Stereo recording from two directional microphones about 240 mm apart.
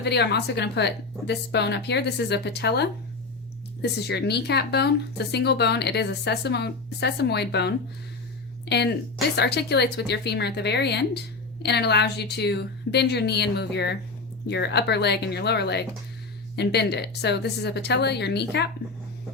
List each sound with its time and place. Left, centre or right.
0.0 s speech: left
8.7 s speech: left